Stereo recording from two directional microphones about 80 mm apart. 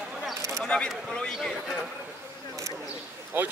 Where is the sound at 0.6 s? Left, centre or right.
Centre.